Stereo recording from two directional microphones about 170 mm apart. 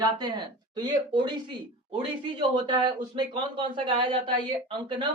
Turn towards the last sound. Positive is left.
turn(degrees=-30)  # may be behind; listen again after turning